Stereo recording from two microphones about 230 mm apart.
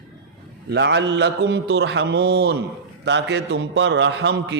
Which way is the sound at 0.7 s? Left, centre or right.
Right.